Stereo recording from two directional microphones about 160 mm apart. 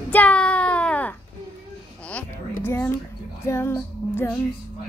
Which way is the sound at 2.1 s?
10° left (ahead or behind).